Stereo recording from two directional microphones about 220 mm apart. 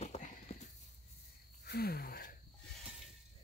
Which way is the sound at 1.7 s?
45° left (ahead or behind).